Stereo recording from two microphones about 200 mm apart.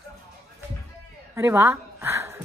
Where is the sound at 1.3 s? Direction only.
10° right (ahead or behind).